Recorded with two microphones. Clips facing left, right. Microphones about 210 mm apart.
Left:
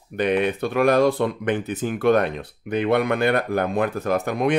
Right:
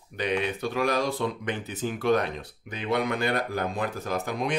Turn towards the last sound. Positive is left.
turn(degrees=60)  # may be behind; listen again after turning